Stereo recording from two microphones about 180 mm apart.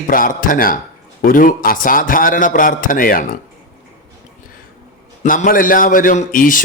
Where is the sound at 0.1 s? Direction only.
50° left (ahead or behind).